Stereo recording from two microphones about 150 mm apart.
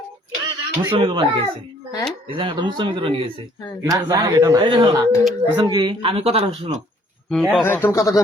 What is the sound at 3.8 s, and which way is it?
Speech, 25° right (ahead or behind).